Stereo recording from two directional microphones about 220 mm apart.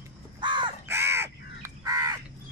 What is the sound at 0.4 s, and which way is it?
Crow, 20° right (ahead or behind).